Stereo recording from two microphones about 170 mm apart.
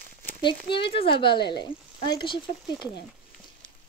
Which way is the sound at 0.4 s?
30° left (ahead or behind).